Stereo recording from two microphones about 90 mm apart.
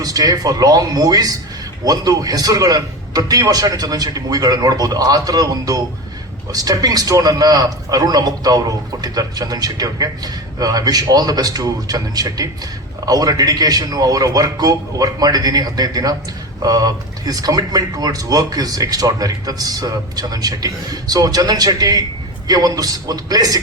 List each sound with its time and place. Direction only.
0.0 s speech: 45° right (ahead or behind)